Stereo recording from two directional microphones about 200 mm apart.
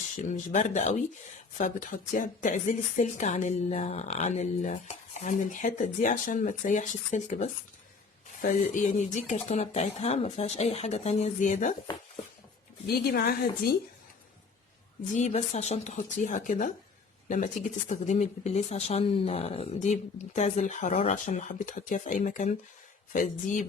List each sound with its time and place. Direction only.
0.3 s a woman's voice: 40° left (ahead or behind)
12.9 s a woman's voice: 50° left (ahead or behind)
15.1 s a woman's voice: 35° left (ahead or behind)